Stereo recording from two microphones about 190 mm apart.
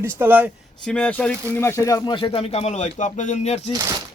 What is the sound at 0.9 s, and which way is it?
Speech, 5° left (ahead or behind).